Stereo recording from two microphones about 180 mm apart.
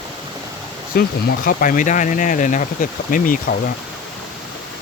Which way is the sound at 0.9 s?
55° left (ahead or behind).